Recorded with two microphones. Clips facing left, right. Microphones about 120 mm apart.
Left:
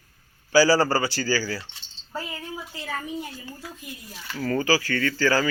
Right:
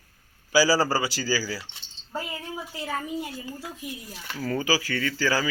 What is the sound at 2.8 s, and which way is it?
Speech, 25° right (ahead or behind).